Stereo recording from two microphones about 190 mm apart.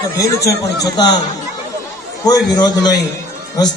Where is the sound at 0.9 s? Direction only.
20° left (ahead or behind).